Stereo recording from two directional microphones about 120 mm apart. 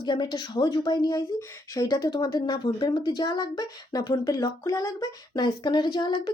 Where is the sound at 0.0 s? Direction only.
40° left (ahead or behind).